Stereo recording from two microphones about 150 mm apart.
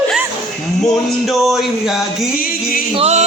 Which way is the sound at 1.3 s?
Centre (ahead or behind).